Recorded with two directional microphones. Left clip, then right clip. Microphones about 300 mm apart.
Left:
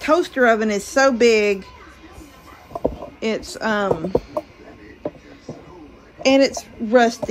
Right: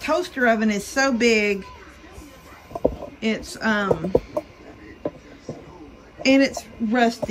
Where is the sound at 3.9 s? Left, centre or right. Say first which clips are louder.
Even; right.